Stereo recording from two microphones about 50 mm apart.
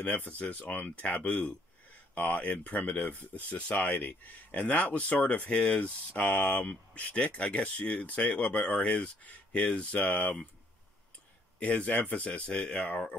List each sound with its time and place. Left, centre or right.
0.4 s speech: left
6.6 s speech: left
11.6 s speech: left